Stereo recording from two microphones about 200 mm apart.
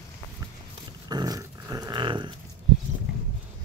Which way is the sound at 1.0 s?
20° right (ahead or behind).